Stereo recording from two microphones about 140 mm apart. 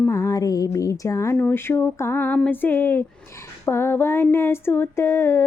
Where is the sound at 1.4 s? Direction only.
15° left (ahead or behind).